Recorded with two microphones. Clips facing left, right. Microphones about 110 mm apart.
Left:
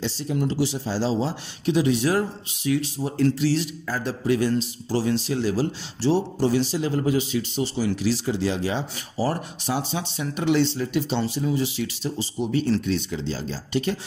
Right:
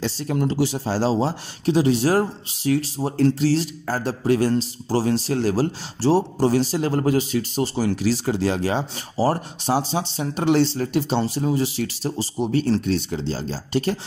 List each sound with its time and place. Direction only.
0.0 s a man's voice: 50° right (ahead or behind)
9.1 s a man's voice: 35° right (ahead or behind)